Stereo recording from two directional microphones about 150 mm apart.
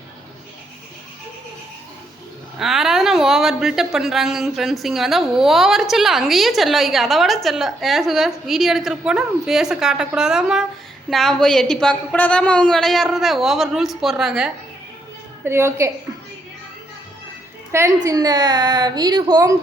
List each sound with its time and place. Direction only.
2.6 s speech: centre (ahead or behind)
15.4 s a woman's voice: 20° right (ahead or behind)
17.7 s a woman's voice: 20° right (ahead or behind)